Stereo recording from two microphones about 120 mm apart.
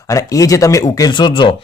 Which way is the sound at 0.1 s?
25° left (ahead or behind).